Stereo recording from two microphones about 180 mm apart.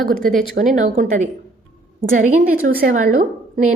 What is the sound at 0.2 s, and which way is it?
A woman's voice, 50° right (ahead or behind).